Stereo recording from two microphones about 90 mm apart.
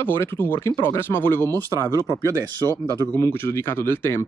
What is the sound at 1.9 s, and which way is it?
Speech, 35° right (ahead or behind).